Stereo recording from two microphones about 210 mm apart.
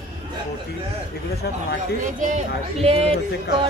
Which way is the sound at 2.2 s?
30° right (ahead or behind).